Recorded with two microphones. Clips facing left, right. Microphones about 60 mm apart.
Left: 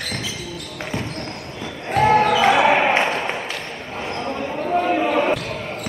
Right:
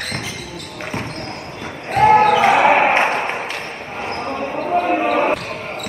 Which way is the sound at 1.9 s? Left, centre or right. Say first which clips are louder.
Right 4 dB; right.